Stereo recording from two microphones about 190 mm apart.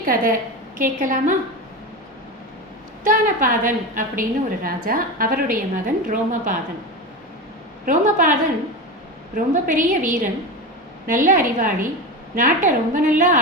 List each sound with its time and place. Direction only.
0.0 s a woman's voice: 45° right (ahead or behind)
3.0 s a woman's voice: 45° right (ahead or behind)
7.9 s a woman's voice: 45° right (ahead or behind)